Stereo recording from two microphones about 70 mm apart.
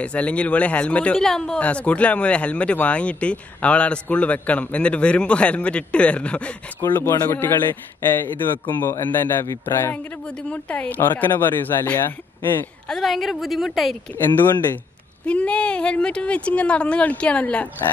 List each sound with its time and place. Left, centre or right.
0.0 s speech: centre
1.1 s speech: centre
6.8 s a man's voice: left
10.2 s speech: centre
11.0 s speech: left
12.8 s a woman's voice: centre
15.2 s speech: centre